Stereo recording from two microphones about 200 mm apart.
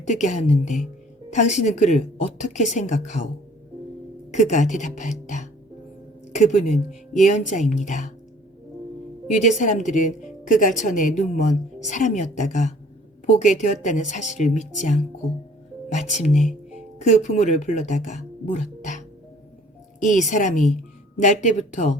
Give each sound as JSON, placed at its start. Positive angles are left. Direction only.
{"t": 0.0, "sound": "a woman's voice", "side_deg": 35}
{"t": 4.3, "sound": "a woman's voice", "side_deg": 35}
{"t": 9.3, "sound": "a woman's voice", "side_deg": 35}